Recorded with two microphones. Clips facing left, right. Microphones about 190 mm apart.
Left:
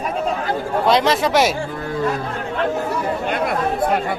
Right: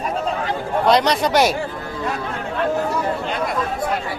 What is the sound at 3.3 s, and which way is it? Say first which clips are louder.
Chatter: left 3 dB; 55° left (ahead or behind).